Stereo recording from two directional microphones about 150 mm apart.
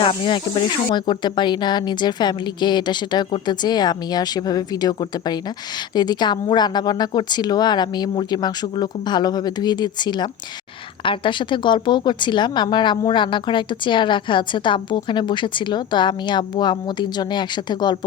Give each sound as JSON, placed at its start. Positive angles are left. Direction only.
{"t": 0.0, "sound": "a woman's voice", "side_deg": 35}